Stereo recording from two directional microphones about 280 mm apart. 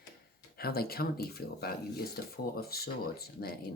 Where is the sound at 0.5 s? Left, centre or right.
Left.